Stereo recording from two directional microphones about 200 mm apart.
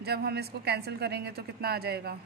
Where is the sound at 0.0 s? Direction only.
55° right (ahead or behind).